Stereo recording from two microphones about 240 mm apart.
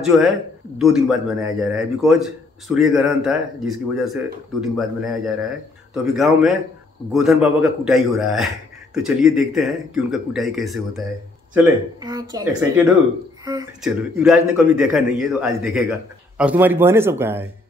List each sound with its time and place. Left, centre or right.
0.0 s speech: centre
12.0 s a man's voice: centre
13.8 s a man's voice: centre